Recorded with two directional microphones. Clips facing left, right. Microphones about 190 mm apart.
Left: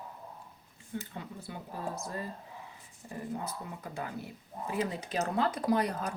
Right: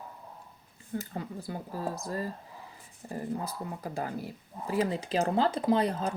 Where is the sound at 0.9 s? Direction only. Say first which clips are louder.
Right 4 dB; 40° right (ahead or behind).